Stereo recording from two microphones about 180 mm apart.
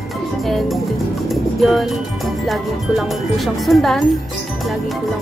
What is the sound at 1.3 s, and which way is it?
Music, centre (ahead or behind).